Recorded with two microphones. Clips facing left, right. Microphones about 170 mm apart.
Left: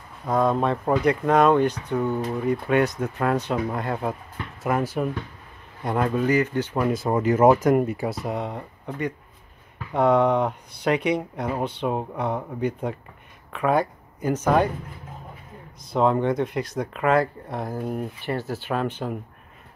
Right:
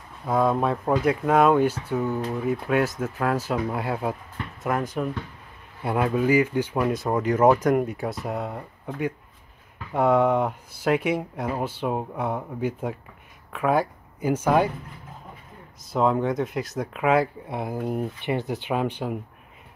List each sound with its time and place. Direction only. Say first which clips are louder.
0.2 s speech: even; 5° right (ahead or behind)
4.6 s speech: left 2 dB; 5° left (ahead or behind); by 6.9 s 10° right (ahead or behind)
6.9 s speech: left 2 dB; centre (ahead or behind)
15.9 s speech: left 1 dB; 5° right (ahead or behind)